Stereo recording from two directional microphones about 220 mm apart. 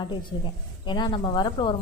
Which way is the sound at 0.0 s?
20° left (ahead or behind).